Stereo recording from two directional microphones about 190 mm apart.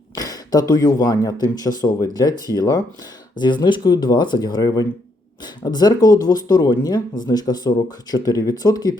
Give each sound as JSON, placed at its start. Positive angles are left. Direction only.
{"t": 0.2, "sound": "speech", "side_deg": 20}